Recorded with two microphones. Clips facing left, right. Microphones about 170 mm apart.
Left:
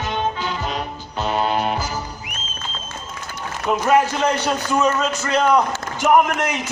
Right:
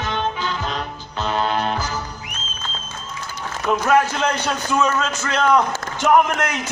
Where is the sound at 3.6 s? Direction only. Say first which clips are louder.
Even; 10° left (ahead or behind).